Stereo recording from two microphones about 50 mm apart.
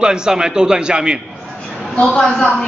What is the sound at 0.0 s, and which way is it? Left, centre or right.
A man's voice, centre.